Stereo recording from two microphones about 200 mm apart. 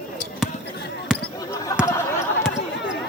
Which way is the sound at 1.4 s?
15° left (ahead or behind).